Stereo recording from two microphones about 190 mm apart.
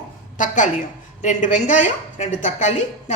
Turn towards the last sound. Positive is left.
turn(degrees=40)  # may be behind; listen again after turning